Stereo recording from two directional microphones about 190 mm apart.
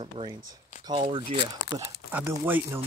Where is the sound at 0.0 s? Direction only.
25° right (ahead or behind).